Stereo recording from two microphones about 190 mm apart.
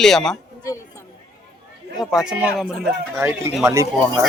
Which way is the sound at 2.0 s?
Centre (ahead or behind).